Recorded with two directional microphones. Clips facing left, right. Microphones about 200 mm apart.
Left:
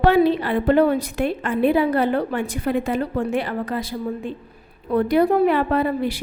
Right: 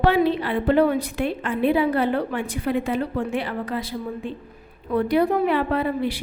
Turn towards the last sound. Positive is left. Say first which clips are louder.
# left 2 dB
turn(degrees=45)  # may be behind; listen again after turning